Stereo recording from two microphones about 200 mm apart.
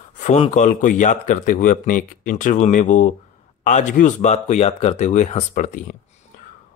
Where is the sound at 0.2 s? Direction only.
35° left (ahead or behind).